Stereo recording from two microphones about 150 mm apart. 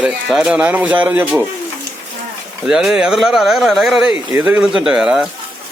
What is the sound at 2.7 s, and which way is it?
Speech, 5° right (ahead or behind).